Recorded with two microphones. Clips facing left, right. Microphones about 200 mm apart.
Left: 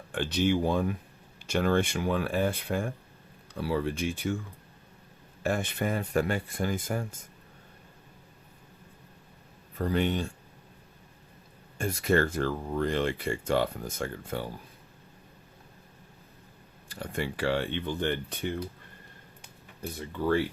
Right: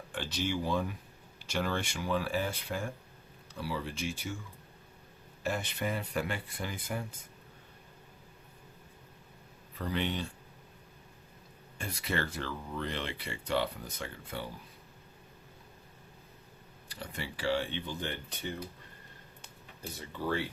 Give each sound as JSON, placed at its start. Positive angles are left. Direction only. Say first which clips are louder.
{"t": 0.1, "sound": "speech", "louder": "left 8 dB", "side_deg": 55}
{"t": 5.4, "sound": "speech", "louder": "left 5 dB", "side_deg": 50}
{"t": 9.7, "sound": "speech", "louder": "left 6 dB", "side_deg": 45}
{"t": 11.8, "sound": "speech", "louder": "left 10 dB", "side_deg": 45}
{"t": 16.9, "sound": "speech", "louder": "left 8 dB", "side_deg": 50}
{"t": 20.2, "sound": "speech", "louder": "left 7 dB", "side_deg": 55}